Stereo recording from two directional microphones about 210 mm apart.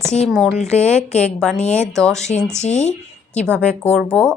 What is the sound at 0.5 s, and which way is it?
Speech, 30° left (ahead or behind).